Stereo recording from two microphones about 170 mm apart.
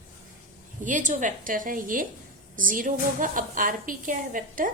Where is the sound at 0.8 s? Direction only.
50° right (ahead or behind).